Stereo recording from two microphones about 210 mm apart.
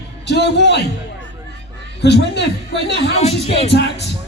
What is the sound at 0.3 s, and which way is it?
Speech, 55° left (ahead or behind).